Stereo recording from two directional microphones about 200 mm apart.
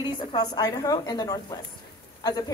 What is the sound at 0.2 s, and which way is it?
A woman's voice, 20° left (ahead or behind).